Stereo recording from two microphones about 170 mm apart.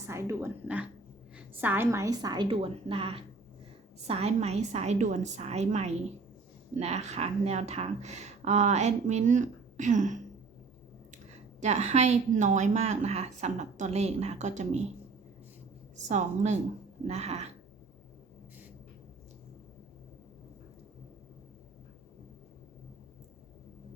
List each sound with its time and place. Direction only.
0.1 s a woman's voice: 15° right (ahead or behind); by 10.2 s 45° right (ahead or behind)
11.6 s speech: 40° right (ahead or behind)
16.0 s a woman's voice: 40° right (ahead or behind)